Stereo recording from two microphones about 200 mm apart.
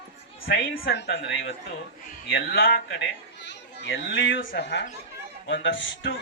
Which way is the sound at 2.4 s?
50° left (ahead or behind).